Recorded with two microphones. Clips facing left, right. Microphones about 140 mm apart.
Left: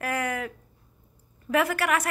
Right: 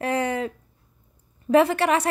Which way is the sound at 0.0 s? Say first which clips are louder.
Right 5 dB; 30° right (ahead or behind).